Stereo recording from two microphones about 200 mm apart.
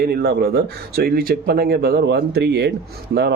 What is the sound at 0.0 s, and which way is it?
Speech, 50° right (ahead or behind).